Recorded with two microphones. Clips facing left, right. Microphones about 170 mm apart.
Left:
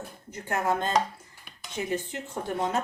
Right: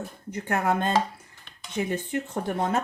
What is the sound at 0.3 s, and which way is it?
Speech, 60° right (ahead or behind).